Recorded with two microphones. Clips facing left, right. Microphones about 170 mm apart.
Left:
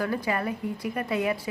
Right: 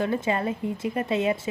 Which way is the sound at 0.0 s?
25° right (ahead or behind).